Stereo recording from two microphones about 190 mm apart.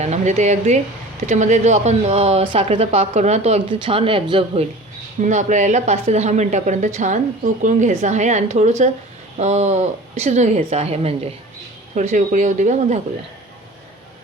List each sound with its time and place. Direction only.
0.0 s speech: 35° right (ahead or behind)
5.2 s speech: 40° right (ahead or behind)